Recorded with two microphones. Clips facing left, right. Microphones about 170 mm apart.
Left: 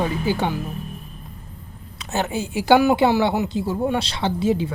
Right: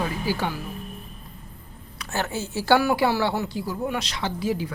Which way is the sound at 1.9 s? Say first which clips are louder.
Left 4 dB; 20° left (ahead or behind).